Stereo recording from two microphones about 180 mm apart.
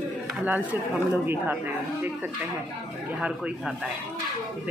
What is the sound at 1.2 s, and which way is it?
Speech, 10° right (ahead or behind).